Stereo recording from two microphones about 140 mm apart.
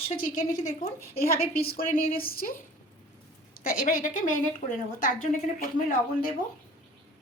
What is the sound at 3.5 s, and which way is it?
A woman's voice, 85° left.